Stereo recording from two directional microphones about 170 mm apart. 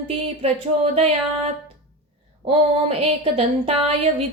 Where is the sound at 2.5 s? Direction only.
35° right (ahead or behind).